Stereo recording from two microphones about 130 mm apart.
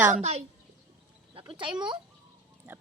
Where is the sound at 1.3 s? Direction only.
40° right (ahead or behind).